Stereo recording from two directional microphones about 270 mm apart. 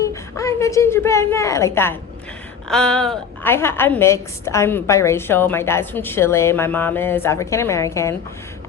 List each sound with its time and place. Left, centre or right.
0.1 s a woman's voice: centre